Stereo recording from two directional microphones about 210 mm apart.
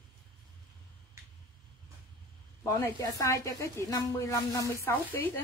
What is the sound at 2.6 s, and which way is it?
Speech, 15° left (ahead or behind).